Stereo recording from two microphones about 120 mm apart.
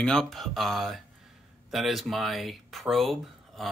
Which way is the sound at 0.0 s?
5° left (ahead or behind).